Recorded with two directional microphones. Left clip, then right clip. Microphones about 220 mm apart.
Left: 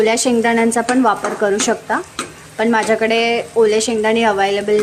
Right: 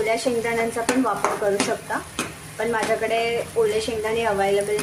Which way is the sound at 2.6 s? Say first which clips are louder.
Left 8 dB; 45° left (ahead or behind).